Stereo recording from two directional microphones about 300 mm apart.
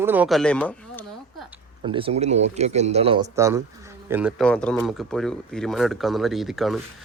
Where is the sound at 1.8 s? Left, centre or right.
Centre.